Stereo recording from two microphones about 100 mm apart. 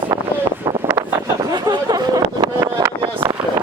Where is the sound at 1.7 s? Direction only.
40° right (ahead or behind).